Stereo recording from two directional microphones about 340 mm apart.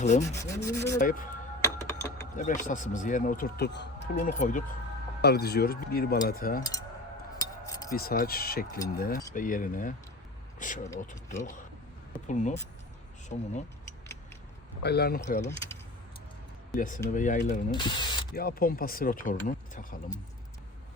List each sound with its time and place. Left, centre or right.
0.0 s speech: left
0.3 s rub: centre
0.9 s speech: left
1.6 s a sound: centre
2.3 s speech: left
6.6 s rub: centre
7.3 s cutlery: centre
7.9 s speech: left
14.8 s speech: left
15.4 s rub: centre
16.7 s speech: left
18.3 s speech: left